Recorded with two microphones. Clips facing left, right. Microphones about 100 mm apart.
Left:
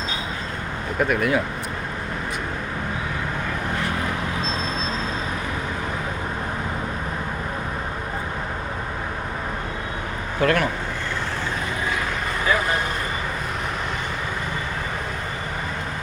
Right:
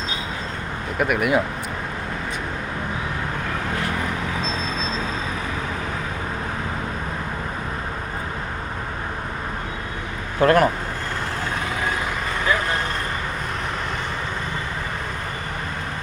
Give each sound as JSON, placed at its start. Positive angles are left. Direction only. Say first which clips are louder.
{"t": 0.9, "sound": "speech", "louder": "even", "side_deg": -10}
{"t": 10.4, "sound": "speech", "louder": "right 5 dB", "side_deg": -35}